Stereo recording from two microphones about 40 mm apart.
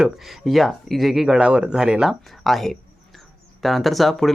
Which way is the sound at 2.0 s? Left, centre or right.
Centre.